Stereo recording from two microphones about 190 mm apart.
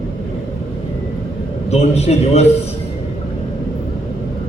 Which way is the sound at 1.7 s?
35° left (ahead or behind).